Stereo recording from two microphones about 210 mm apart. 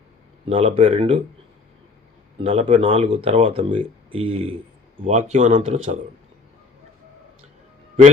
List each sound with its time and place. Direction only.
0.4 s speech: 30° right (ahead or behind)
2.4 s speech: 30° right (ahead or behind)